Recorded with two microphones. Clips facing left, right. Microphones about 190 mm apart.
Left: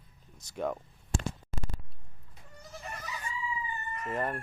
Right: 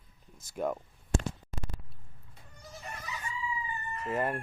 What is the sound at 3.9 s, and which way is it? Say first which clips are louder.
Speech: right 2 dB; 5° right (ahead or behind).